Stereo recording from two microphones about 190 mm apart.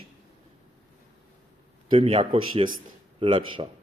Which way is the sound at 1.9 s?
30° right (ahead or behind).